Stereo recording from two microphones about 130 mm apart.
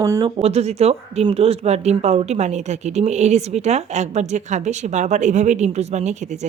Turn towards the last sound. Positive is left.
turn(degrees=-60)  # may be behind; listen again after turning